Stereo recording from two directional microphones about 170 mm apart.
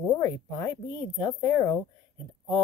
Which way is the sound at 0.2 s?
20° left (ahead or behind).